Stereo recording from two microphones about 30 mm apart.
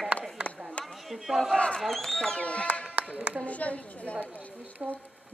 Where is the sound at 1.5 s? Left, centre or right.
Left.